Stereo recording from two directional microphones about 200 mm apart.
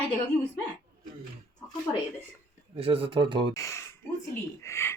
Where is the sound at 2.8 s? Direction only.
30° right (ahead or behind).